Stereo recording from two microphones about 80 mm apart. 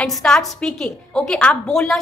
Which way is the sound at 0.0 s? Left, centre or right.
Centre.